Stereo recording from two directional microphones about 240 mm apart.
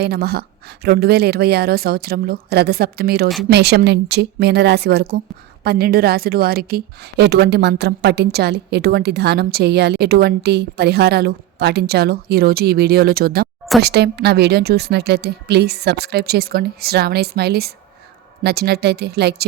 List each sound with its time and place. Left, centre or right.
0.0 s a woman's voice: right